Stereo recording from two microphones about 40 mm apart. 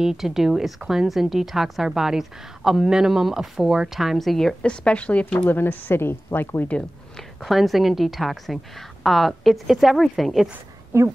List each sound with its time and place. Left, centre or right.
0.0 s speech: centre
4.6 s a woman's voice: left
5.5 s speech: left
7.4 s a woman's voice: centre
10.9 s speech: right